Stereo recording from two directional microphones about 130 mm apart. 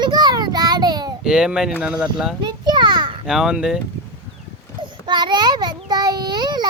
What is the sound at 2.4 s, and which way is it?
Children playing, 35° right (ahead or behind).